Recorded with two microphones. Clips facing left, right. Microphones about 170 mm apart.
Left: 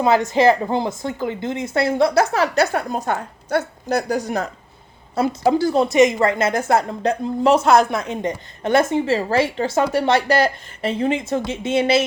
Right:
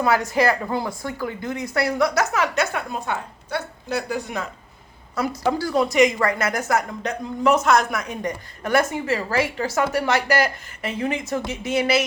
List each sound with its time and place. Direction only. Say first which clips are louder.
0.0 s a woman's voice: left 4 dB; 25° left (ahead or behind); by 4.4 s 40° left (ahead or behind)
5.1 s a woman's voice: left 5 dB; 30° left (ahead or behind)